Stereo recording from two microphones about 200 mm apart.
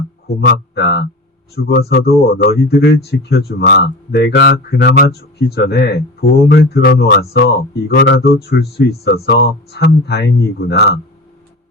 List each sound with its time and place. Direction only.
0.3 s speech: 55° left (ahead or behind)